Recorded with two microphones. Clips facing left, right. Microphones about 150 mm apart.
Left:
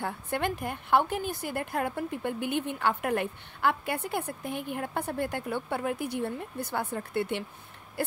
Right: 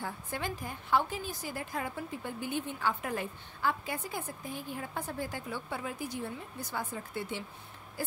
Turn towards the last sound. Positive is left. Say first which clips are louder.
# left 7 dB
turn(degrees=65)  # may be behind; listen again after turning